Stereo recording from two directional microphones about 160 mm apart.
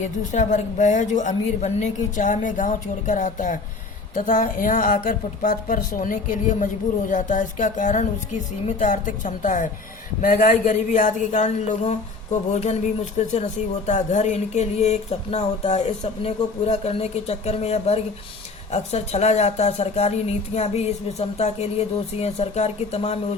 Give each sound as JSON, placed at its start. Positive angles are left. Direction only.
{"t": 0.0, "sound": "a woman's voice", "side_deg": 50}